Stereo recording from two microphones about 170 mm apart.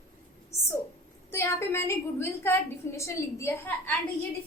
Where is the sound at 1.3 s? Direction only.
15° left (ahead or behind).